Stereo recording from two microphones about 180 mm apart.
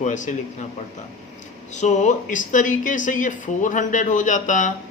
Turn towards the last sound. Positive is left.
turn(degrees=45)  # may be behind; listen again after turning